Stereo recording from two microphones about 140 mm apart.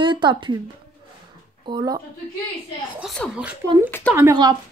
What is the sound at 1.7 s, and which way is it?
Speech, 30° right (ahead or behind).